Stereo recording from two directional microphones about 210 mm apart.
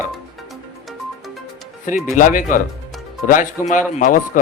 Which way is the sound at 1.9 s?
40° left (ahead or behind).